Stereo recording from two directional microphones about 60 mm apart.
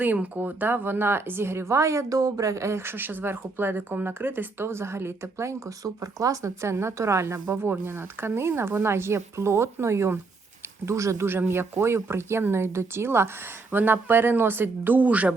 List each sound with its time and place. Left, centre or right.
0.0 s speech: right
5.8 s a woman's voice: right
7.5 s a woman's voice: right
11.3 s speech: right